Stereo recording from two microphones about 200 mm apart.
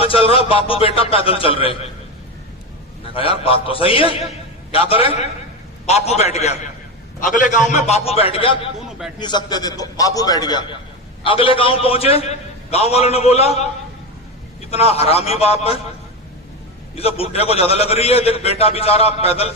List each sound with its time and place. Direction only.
0.0 s a man's voice: 30° left (ahead or behind)
3.2 s a man's voice: 30° left (ahead or behind)
16.9 s a man's voice: 30° left (ahead or behind)